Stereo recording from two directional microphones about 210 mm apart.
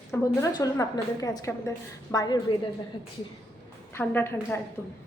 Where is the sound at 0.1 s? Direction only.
15° left (ahead or behind).